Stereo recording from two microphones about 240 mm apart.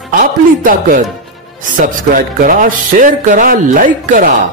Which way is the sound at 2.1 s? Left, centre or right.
Right.